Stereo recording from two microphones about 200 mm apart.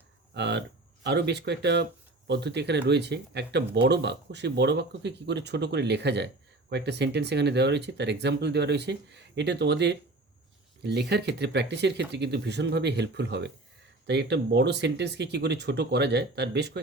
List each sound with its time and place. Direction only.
0.3 s speech: 60° right (ahead or behind)